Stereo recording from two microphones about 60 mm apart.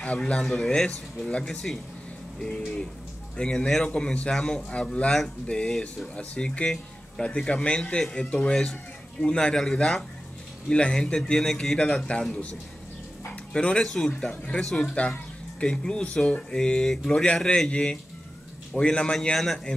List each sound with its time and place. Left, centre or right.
0.2 s a man's voice: centre
5.7 s a man's voice: centre
6.1 s a man's voice: centre
8.0 s a man's voice: centre
8.3 s a man's voice: centre
12.1 s a man's voice: centre
13.5 s a man's voice: centre
19.3 s a man's voice: centre